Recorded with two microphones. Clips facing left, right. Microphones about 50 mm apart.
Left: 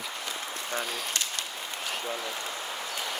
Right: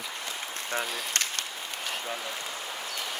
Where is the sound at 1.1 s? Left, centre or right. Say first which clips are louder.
Right 2 dB; right.